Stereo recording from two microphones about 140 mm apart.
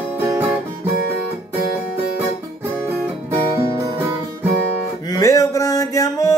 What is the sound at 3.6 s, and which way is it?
Music, 20° right (ahead or behind).